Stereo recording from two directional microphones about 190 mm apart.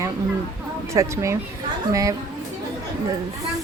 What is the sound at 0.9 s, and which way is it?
Speech, 15° right (ahead or behind).